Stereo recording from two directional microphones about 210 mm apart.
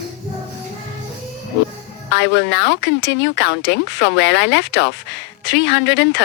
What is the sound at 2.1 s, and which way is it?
Speech, 55° left (ahead or behind).